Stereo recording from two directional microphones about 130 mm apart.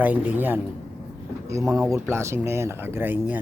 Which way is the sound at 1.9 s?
20° right (ahead or behind).